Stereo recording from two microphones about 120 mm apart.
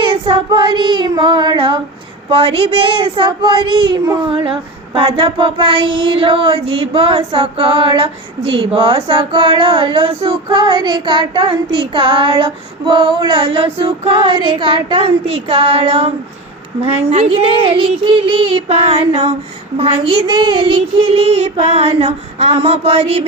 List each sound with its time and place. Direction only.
0.0 s child singing: 45° right (ahead or behind)
3.9 s speech: 30° right (ahead or behind)
4.9 s child singing: 50° right (ahead or behind)